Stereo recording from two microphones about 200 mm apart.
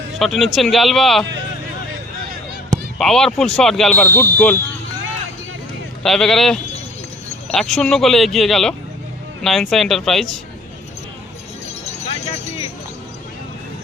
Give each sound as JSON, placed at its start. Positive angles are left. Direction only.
{"t": 0.2, "sound": "speech", "side_deg": 0}
{"t": 3.0, "sound": "speech", "side_deg": 0}
{"t": 6.0, "sound": "speech", "side_deg": 0}
{"t": 11.9, "sound": "vehicle", "side_deg": 35}